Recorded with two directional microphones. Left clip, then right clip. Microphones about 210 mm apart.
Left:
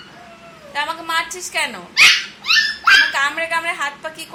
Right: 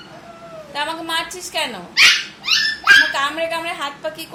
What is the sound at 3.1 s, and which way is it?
A child's voice, 20° right (ahead or behind).